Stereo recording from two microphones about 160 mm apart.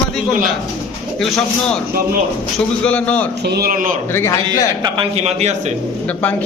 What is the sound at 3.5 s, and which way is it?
Speech, 75° right (ahead or behind).